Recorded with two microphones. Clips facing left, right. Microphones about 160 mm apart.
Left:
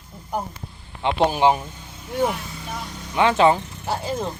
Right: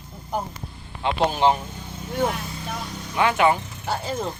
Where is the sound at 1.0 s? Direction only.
15° left (ahead or behind).